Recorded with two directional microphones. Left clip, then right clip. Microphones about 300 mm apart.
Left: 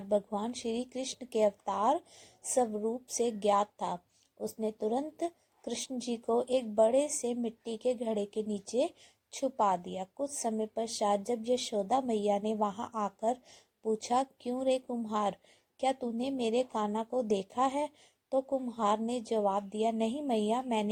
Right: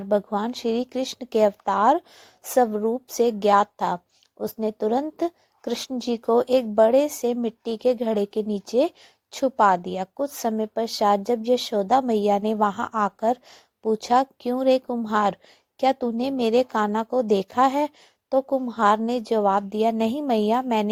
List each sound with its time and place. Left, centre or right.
0.1 s speech: right